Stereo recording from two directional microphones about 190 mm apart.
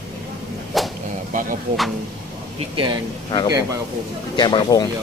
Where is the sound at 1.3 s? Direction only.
45° right (ahead or behind).